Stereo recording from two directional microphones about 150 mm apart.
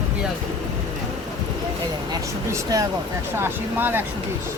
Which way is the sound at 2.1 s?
25° right (ahead or behind).